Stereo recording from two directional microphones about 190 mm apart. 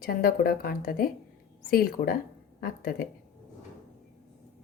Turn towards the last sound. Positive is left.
turn(degrees=50)  # may be behind; listen again after turning